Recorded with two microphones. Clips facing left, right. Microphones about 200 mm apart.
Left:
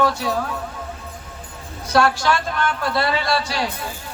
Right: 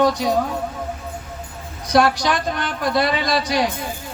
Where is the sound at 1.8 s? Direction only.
15° right (ahead or behind).